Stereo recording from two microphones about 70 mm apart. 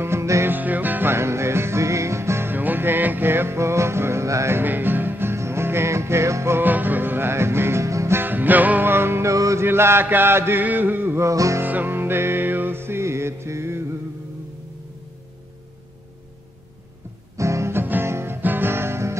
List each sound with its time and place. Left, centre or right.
0.0 s music: right
0.5 s music: right
1.1 s music: right
2.5 s music: right
6.6 s music: right
8.2 s music: right
9.3 s music: right
9.7 s chant: right
11.1 s music: right
11.6 s music: right
17.4 s music: right